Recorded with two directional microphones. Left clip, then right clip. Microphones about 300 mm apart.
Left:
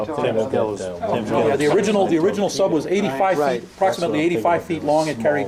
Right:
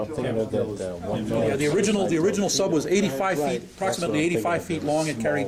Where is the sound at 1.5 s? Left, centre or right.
Centre.